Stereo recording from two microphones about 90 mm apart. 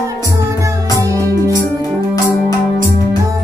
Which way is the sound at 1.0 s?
40° right (ahead or behind).